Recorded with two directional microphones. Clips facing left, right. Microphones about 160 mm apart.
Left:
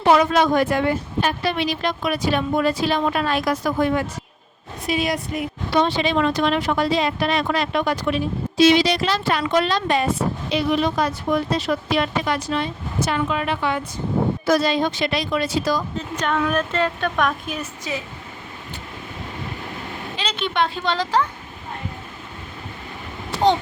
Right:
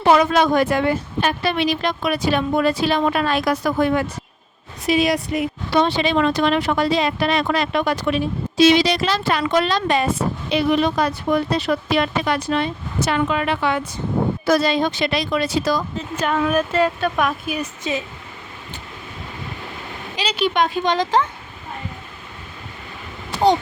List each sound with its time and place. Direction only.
0.1 s speech: 85° right
1.2 s speech: 70° right (ahead or behind)
4.9 s speech: 85° right
8.5 s speech: 90° right; by 15.8 s 75° right (ahead or behind)
16.0 s speech: 5° right (ahead or behind)
20.4 s speech: 15° right (ahead or behind)